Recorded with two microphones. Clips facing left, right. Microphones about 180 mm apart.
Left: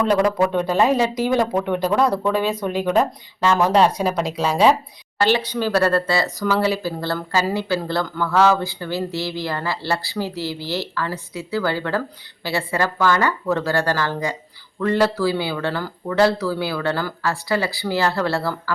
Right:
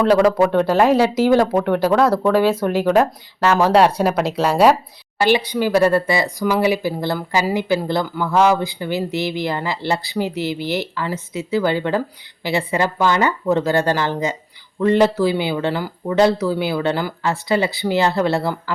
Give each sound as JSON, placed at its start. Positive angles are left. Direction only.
{"t": 0.1, "sound": "speech", "side_deg": -5}